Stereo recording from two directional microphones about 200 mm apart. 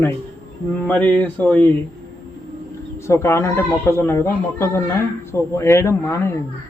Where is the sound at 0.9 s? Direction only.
10° left (ahead or behind).